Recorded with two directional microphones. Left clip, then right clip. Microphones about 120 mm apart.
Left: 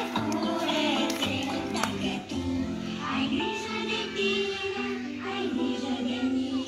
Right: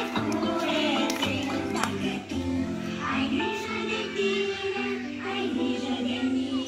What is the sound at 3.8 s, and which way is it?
Music, 30° right (ahead or behind).